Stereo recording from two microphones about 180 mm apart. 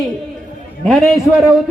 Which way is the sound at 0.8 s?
Centre (ahead or behind).